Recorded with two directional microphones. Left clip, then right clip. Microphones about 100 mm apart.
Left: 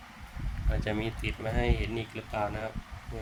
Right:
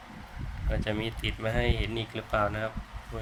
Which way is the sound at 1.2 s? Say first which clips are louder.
Right 2 dB; 45° right (ahead or behind).